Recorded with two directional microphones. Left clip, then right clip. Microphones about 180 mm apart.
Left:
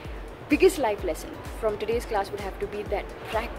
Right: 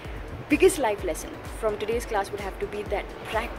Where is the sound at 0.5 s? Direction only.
5° left (ahead or behind).